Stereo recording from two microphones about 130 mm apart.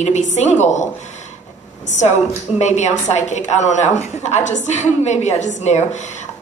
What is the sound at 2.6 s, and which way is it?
A woman's voice, 60° left (ahead or behind).